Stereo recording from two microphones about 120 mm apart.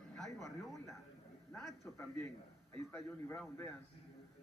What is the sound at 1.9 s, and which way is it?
A man's voice, 25° left (ahead or behind).